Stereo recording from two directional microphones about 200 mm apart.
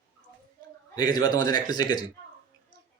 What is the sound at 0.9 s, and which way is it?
Speech, 20° left (ahead or behind).